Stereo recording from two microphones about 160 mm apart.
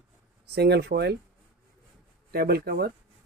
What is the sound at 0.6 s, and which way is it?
Speech, 90° right.